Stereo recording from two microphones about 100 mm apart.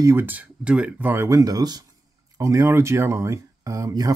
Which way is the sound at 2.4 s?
30° right (ahead or behind).